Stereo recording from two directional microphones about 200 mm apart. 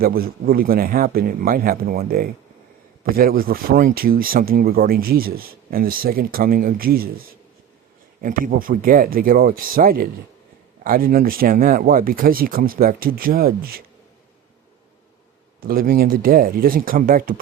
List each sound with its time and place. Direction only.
0.0 s speech: 50° right (ahead or behind)
15.6 s speech: 45° right (ahead or behind)